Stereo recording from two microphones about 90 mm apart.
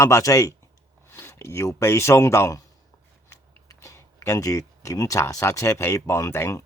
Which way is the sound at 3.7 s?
35° left (ahead or behind).